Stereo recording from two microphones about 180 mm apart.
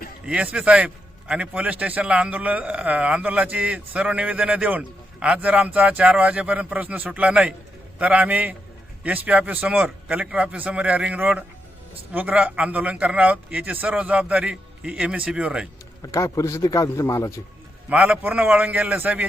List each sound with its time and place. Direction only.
0.3 s a man's voice: 5° right (ahead or behind)
16.1 s a man's voice: 15° left (ahead or behind)
17.8 s a man's voice: 5° right (ahead or behind)